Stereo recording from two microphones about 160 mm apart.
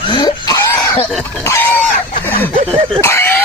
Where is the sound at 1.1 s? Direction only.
Centre (ahead or behind).